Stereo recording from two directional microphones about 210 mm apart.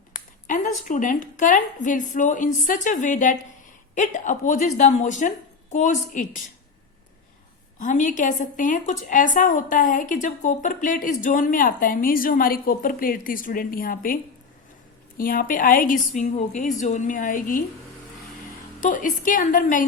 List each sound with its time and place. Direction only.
0.1 s a woman's voice: 35° left (ahead or behind)
7.8 s a woman's voice: 35° left (ahead or behind)
15.2 s a woman's voice: 40° left (ahead or behind)
18.8 s a woman's voice: 40° left (ahead or behind)